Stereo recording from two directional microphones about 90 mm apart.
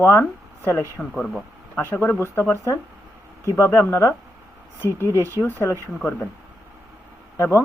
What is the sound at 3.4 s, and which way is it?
Speech, 30° left (ahead or behind).